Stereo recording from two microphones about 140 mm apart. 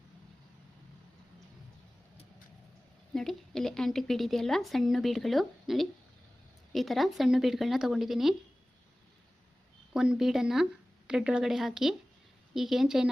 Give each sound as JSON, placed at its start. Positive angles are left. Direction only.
{"t": 3.1, "sound": "speech", "side_deg": 5}
{"t": 9.9, "sound": "speech", "side_deg": -5}